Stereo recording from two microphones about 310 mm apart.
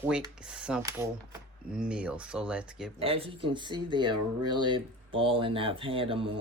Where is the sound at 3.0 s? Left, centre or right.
Centre.